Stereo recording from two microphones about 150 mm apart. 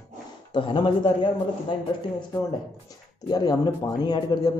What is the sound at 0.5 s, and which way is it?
Speech, 30° left (ahead or behind).